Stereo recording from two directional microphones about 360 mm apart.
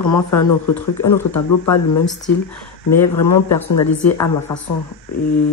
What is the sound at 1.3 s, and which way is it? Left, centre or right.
Speech, left.